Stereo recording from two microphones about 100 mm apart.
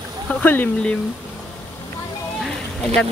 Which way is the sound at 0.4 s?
15° left (ahead or behind).